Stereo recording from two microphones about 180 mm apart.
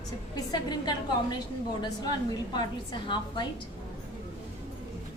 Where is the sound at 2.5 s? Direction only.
25° left (ahead or behind).